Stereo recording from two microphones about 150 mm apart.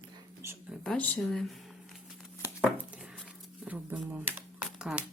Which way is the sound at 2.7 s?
10° right (ahead or behind).